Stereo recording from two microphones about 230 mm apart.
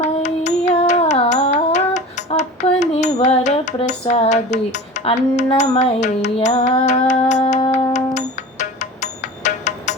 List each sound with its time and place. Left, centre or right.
0.0 s music: left